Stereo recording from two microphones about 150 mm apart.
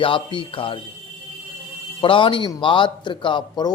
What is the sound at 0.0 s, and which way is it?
Speech, 35° left (ahead or behind).